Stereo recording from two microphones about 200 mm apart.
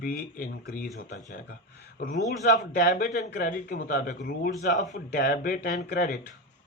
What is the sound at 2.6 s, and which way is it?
Speech, 40° left (ahead or behind).